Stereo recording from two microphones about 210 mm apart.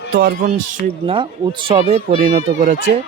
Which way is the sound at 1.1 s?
20° right (ahead or behind).